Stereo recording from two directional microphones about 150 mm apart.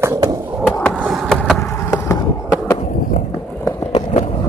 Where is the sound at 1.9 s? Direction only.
20° left (ahead or behind).